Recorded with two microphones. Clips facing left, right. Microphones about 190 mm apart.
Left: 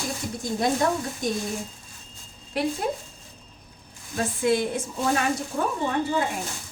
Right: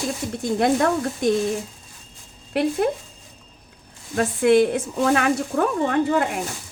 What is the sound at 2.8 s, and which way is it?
Speech, 75° right (ahead or behind).